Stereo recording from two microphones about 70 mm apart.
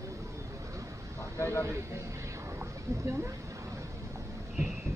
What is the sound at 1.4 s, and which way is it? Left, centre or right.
Speech, left.